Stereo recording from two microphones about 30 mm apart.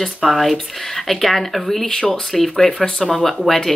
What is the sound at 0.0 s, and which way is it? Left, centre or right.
Speech, centre.